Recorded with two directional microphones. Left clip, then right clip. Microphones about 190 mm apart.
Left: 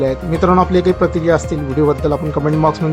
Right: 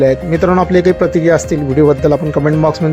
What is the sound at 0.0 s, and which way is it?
A man's voice, 10° right (ahead or behind).